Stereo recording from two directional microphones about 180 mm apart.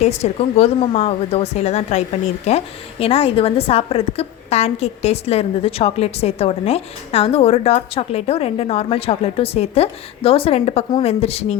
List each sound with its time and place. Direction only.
0.0 s a woman's voice: 35° left (ahead or behind)